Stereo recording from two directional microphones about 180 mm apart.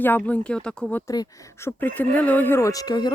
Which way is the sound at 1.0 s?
20° left (ahead or behind).